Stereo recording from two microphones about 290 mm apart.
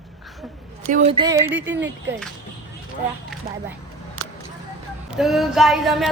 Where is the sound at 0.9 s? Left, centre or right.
Right.